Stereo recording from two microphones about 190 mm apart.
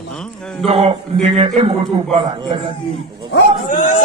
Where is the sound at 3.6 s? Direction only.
45° left (ahead or behind).